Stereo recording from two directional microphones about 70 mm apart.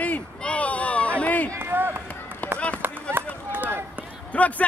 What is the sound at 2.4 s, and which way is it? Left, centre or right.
Run, left.